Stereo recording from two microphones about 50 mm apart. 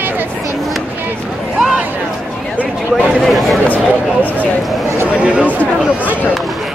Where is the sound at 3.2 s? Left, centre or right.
Centre.